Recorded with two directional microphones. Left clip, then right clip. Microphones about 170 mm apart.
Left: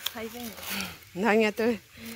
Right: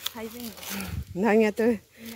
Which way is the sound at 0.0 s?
30° right (ahead or behind).